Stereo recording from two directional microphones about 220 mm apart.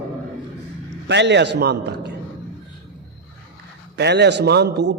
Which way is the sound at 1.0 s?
50° right (ahead or behind).